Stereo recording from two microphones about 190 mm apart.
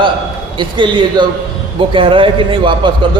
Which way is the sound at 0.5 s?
25° right (ahead or behind).